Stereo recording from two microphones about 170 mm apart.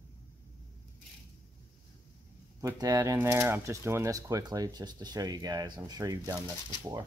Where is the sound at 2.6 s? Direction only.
20° right (ahead or behind).